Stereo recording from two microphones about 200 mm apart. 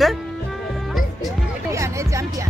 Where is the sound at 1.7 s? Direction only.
15° right (ahead or behind).